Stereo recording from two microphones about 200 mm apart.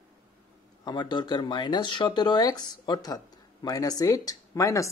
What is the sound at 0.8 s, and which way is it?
Speech, 20° left (ahead or behind).